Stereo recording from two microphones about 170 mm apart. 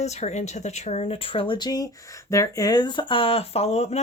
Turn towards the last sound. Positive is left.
turn(degrees=40)  # may be behind; listen again after turning